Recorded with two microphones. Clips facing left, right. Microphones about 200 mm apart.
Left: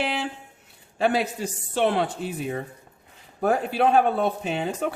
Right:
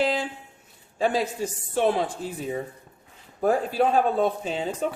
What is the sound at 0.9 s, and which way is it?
Speech, 70° left (ahead or behind).